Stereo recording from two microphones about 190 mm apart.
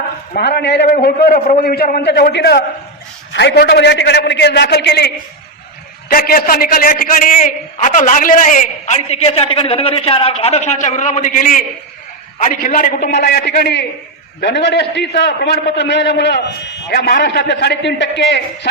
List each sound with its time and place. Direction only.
0.3 s a man's voice: 60° left (ahead or behind)
0.9 s a man's voice: 50° left (ahead or behind)
6.1 s a man's voice: 50° left (ahead or behind); by 18.7 s 65° left (ahead or behind)